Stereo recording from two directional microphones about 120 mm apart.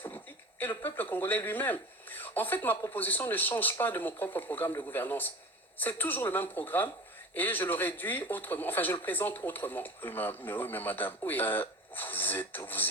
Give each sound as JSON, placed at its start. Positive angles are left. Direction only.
{"t": 0.6, "sound": "speech", "side_deg": 15}